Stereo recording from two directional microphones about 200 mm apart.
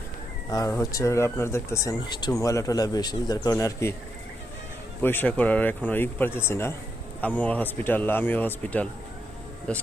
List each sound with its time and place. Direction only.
0.5 s speech: 15° left (ahead or behind)
5.0 s speech: 10° left (ahead or behind)